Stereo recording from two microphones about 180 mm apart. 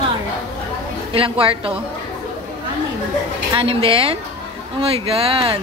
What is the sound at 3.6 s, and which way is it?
Speech, 30° right (ahead or behind).